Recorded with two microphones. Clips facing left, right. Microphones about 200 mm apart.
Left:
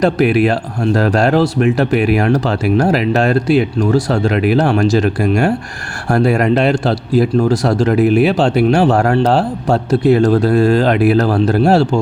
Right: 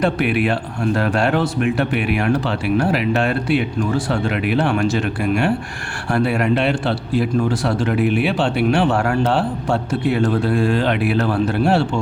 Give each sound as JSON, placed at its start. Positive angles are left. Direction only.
{"t": 0.0, "sound": "speech", "side_deg": 40}